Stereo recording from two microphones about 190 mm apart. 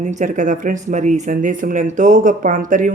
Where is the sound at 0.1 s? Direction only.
40° right (ahead or behind).